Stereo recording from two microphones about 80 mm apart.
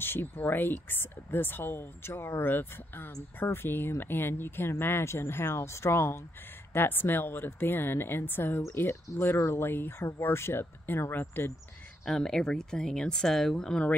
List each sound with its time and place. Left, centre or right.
0.0 s speech: left
12.0 s speech: centre